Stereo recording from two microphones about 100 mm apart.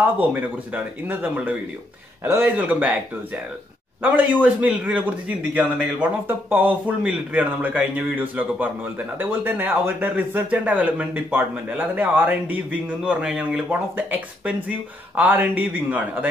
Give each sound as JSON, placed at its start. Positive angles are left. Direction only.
{"t": 0.2, "sound": "a man's voice", "side_deg": -15}
{"t": 4.0, "sound": "a man's voice", "side_deg": -15}